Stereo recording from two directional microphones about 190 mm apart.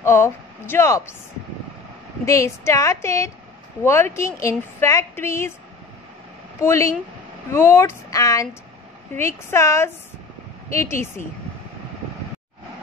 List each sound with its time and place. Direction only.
0.0 s speech: 15° left (ahead or behind)
2.2 s a woman's voice: 15° left (ahead or behind)
6.6 s a woman's voice: 15° left (ahead or behind)